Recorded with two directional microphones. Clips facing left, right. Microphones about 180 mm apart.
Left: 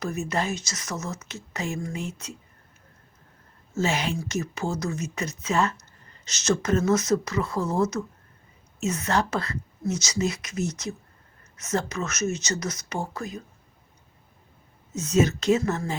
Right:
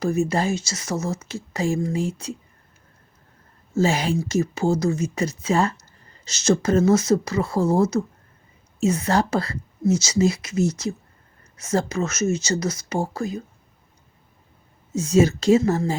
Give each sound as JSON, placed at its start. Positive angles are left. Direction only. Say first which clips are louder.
{"t": 0.0, "sound": "speech", "louder": "right 6 dB", "side_deg": -30}
{"t": 3.8, "sound": "speech", "louder": "right 5 dB", "side_deg": -35}
{"t": 14.9, "sound": "speech", "louder": "right 4 dB", "side_deg": -30}